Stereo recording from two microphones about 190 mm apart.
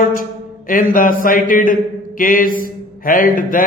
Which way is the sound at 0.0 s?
45° left (ahead or behind).